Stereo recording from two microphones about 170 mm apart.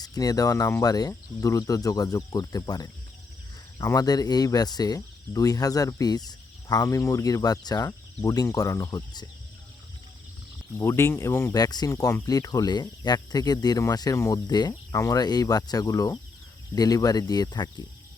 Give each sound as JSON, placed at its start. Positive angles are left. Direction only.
{"t": 0.0, "sound": "speech", "side_deg": 20}
{"t": 10.8, "sound": "speech", "side_deg": 15}